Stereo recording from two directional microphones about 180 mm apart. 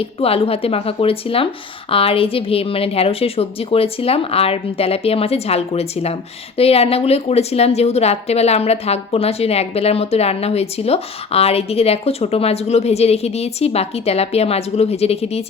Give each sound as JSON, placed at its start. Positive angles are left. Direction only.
{"t": 0.0, "sound": "a woman's voice", "side_deg": 30}